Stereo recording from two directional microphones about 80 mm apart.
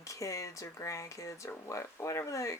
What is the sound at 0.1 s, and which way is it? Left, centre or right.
Speech, left.